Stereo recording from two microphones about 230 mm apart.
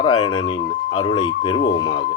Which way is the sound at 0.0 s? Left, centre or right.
Centre.